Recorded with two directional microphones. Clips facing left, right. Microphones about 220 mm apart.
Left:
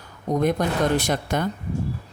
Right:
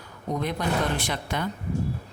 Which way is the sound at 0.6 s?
45° left (ahead or behind).